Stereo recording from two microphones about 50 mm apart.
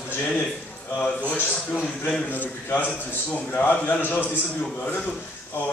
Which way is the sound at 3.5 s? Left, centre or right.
Left.